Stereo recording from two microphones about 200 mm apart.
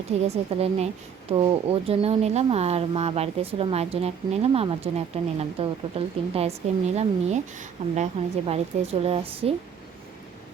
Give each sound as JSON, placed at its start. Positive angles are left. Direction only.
{"t": 0.3, "sound": "speech", "side_deg": -30}